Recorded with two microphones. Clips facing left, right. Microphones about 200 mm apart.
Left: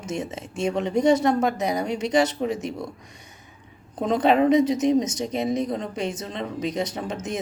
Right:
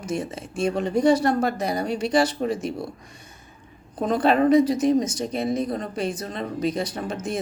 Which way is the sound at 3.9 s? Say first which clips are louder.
Even; 20° left (ahead or behind).